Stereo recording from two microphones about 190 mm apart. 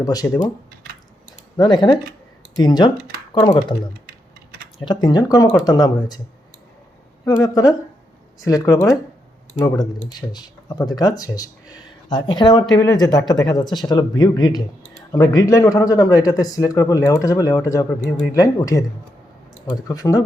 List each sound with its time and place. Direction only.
0.0 s speech: 20° left (ahead or behind)
1.5 s speech: 25° left (ahead or behind)
4.9 s speech: 20° left (ahead or behind)
7.3 s speech: 20° left (ahead or behind)